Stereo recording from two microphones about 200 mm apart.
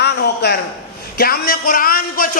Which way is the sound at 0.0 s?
55° left (ahead or behind).